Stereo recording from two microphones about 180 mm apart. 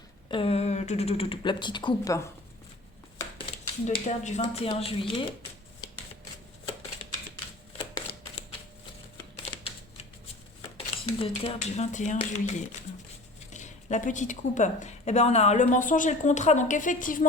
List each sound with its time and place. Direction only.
0.3 s speech: 30° left (ahead or behind)
3.3 s speech: 30° left (ahead or behind)
5.8 s shuffling cards: 20° left (ahead or behind)
7.8 s shuffling cards: 25° left (ahead or behind)
10.6 s speech: 30° left (ahead or behind)
13.5 s speech: 40° left (ahead or behind)